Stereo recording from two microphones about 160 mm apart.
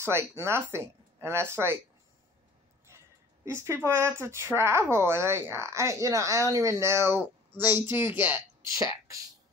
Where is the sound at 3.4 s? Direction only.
15° right (ahead or behind).